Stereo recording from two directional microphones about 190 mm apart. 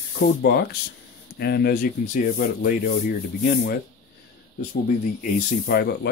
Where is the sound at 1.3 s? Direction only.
55° left (ahead or behind).